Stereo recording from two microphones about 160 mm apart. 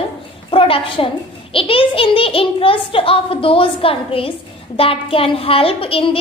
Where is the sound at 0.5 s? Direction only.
35° left (ahead or behind).